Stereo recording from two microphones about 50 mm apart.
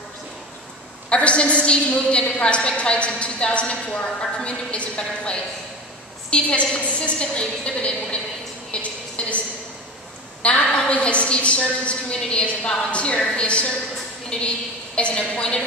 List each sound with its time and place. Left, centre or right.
1.1 s a woman's voice: left
10.4 s a woman's voice: left